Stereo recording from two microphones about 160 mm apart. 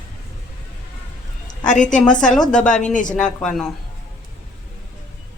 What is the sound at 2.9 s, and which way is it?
Speech, 50° left (ahead or behind).